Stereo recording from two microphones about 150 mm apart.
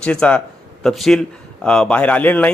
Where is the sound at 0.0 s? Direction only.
5° left (ahead or behind).